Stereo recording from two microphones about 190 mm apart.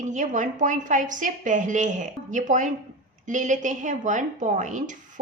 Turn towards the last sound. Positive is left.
turn(degrees=-40)  # may be behind; listen again after turning